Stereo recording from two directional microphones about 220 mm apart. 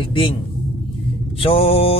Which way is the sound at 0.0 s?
25° left (ahead or behind).